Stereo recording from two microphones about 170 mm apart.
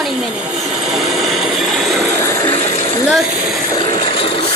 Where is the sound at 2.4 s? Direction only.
50° right (ahead or behind).